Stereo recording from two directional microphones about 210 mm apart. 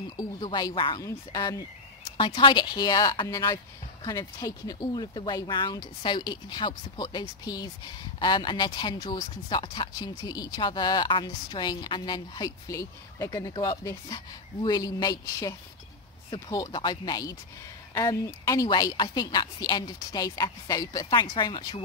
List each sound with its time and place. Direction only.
0.2 s speech: 20° left (ahead or behind)